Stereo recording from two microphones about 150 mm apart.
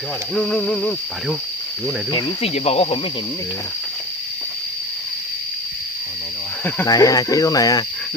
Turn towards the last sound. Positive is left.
turn(degrees=25)  # may be behind; listen again after turning